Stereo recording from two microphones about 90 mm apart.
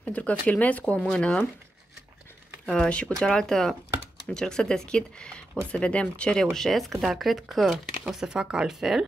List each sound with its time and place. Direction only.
0.0 s speech: 15° left (ahead or behind)
2.6 s speech: 10° left (ahead or behind)